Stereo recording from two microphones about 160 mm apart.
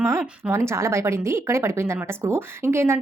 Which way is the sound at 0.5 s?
15° right (ahead or behind).